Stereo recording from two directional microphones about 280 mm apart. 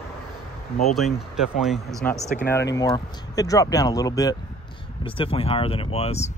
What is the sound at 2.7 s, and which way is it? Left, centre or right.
Speech, centre.